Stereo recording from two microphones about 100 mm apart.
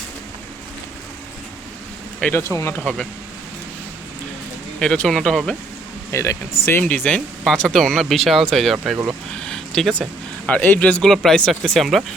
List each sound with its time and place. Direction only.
2.3 s speech: 30° left (ahead or behind)
2.7 s speech: 10° left (ahead or behind)
4.8 s speech: 10° left (ahead or behind)
6.1 s speech: 25° left (ahead or behind)
7.4 s speech: 5° left (ahead or behind)
9.4 s a sound: 5° left (ahead or behind)
10.4 s speech: 15° left (ahead or behind); by 12.0 s centre (ahead or behind)